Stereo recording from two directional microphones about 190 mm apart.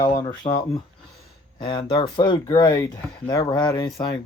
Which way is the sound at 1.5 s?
25° left (ahead or behind).